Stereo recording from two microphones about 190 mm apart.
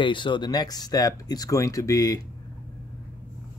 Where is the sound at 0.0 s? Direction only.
25° left (ahead or behind).